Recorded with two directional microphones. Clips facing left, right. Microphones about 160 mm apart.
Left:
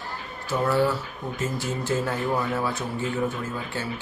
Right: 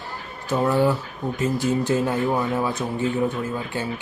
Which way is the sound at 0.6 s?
15° right (ahead or behind).